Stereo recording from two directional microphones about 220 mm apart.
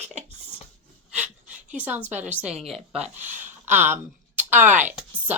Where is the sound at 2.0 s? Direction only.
10° right (ahead or behind).